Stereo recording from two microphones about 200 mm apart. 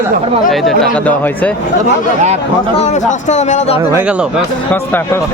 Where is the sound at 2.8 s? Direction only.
35° left (ahead or behind).